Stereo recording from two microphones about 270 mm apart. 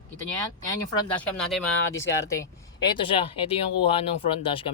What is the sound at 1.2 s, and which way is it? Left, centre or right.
Speech, centre.